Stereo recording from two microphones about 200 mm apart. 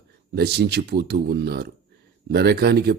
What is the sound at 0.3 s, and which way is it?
Speech, 55° right (ahead or behind).